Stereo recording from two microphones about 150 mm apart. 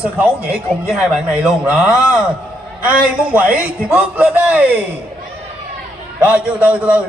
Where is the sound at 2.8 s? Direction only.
10° right (ahead or behind).